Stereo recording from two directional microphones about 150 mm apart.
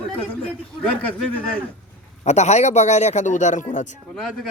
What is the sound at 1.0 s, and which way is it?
Speech, 10° left (ahead or behind).